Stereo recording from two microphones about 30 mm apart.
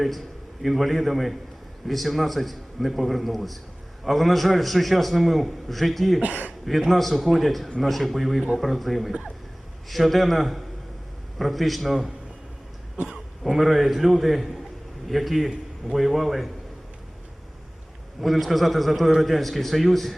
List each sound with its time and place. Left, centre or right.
0.6 s a man's voice: centre
13.1 s a man's voice: centre
18.2 s a man's voice: centre